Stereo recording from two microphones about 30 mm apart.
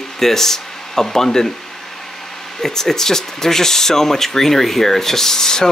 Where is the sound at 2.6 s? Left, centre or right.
Centre.